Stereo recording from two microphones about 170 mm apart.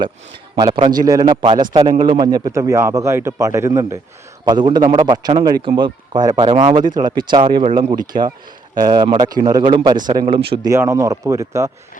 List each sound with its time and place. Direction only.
0.5 s a man's voice: 25° right (ahead or behind)
8.1 s speech: 45° right (ahead or behind)
8.7 s a man's voice: 25° right (ahead or behind)